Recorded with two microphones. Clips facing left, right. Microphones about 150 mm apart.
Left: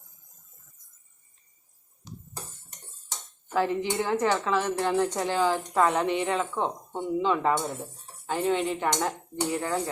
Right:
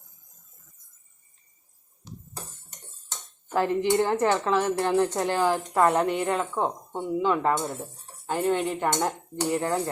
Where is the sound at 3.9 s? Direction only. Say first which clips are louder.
Right 3 dB; 15° right (ahead or behind).